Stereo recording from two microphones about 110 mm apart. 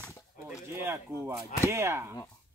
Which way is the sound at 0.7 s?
25° right (ahead or behind).